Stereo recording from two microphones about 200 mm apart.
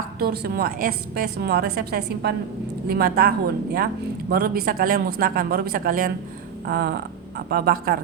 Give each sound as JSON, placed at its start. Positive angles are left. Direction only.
{"t": 0.2, "sound": "a woman's voice", "side_deg": -50}